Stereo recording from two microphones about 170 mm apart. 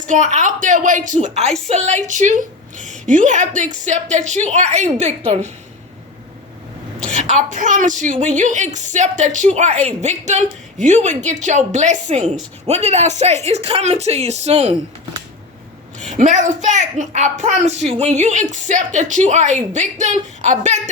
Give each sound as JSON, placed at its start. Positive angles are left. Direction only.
{"t": 0.0, "sound": "a woman's voice", "side_deg": -45}
{"t": 7.3, "sound": "a woman's voice", "side_deg": -50}
{"t": 16.1, "sound": "a woman's voice", "side_deg": -50}